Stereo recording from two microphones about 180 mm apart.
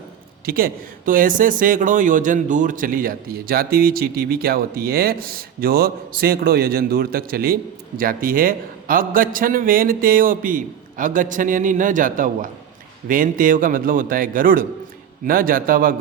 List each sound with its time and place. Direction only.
0.4 s speech: 55° right (ahead or behind)